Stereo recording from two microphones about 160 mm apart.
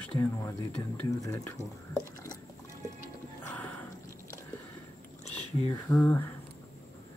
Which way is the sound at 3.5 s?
10° left (ahead or behind).